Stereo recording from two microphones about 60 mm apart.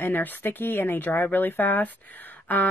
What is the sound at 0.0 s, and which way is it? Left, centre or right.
Speech, left.